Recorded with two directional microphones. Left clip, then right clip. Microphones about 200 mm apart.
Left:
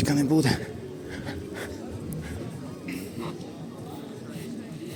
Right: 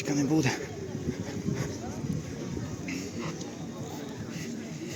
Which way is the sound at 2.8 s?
15° left (ahead or behind).